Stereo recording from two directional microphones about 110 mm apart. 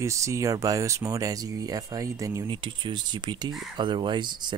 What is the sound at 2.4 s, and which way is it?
Speech, 45° right (ahead or behind).